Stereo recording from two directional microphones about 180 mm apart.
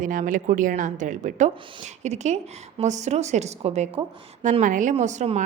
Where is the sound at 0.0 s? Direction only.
45° right (ahead or behind).